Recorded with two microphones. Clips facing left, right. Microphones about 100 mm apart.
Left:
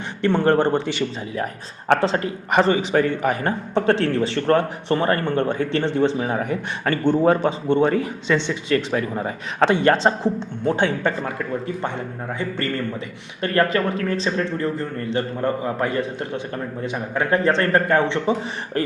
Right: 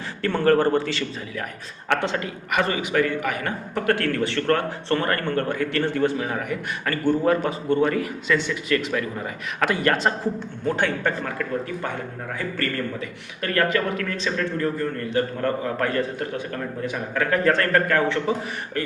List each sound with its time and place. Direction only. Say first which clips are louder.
0.2 s a man's voice: left 2 dB; 25° left (ahead or behind)
1.9 s a man's voice: left 5 dB; 35° left (ahead or behind)